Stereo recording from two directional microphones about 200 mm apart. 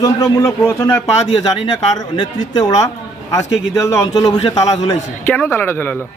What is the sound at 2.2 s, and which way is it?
A man's voice, 20° left (ahead or behind).